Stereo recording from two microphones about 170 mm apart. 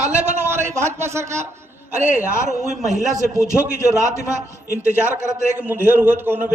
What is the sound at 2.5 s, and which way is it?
A man's voice, 45° right (ahead or behind).